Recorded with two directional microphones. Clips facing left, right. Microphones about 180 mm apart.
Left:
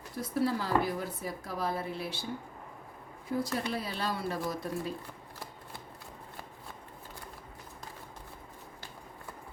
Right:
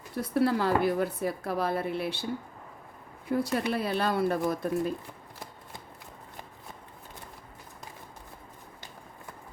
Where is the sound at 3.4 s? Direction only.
65° right (ahead or behind).